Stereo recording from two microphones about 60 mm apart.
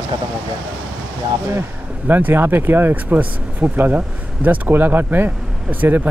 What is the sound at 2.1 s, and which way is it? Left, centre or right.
Speech, right.